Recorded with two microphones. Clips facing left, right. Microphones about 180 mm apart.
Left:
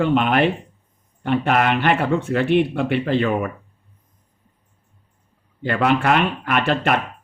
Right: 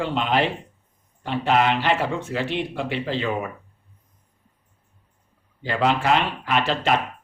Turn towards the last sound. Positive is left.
turn(degrees=55)  # may be behind; listen again after turning